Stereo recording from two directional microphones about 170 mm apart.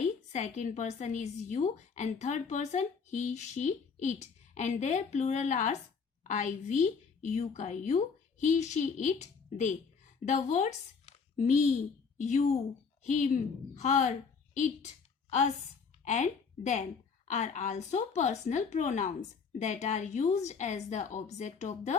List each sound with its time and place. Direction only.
0.3 s a woman's voice: 45° left (ahead or behind)
12.1 s a woman's voice: 45° left (ahead or behind)
16.0 s a woman's voice: 45° left (ahead or behind)